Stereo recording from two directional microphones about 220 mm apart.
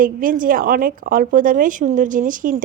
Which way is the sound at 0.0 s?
40° right (ahead or behind).